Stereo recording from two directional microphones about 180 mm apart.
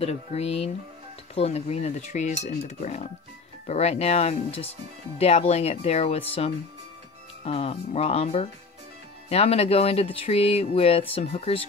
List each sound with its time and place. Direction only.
0.0 s speech: 35° left (ahead or behind)